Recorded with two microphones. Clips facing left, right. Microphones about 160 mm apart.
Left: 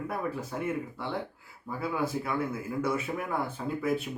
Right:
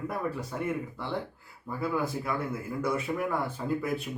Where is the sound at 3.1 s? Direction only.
15° left (ahead or behind).